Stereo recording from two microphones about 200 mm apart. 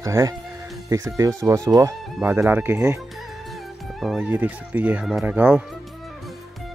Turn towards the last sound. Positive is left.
turn(degrees=-10)  # may be behind; listen again after turning